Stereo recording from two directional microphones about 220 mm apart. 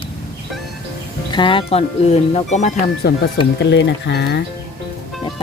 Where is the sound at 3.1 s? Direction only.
45° left (ahead or behind).